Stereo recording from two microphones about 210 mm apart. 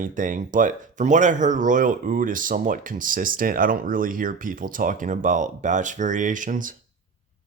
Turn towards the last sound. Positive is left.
turn(degrees=-40)  # may be behind; listen again after turning